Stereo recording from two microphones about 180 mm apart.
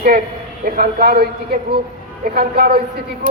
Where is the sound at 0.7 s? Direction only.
60° right (ahead or behind).